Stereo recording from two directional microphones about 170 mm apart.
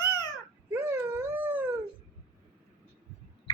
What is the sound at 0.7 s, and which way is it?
Dog, 15° right (ahead or behind).